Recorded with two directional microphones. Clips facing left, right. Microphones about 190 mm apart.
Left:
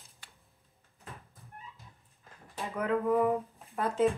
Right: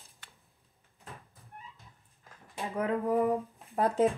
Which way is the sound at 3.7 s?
35° right (ahead or behind).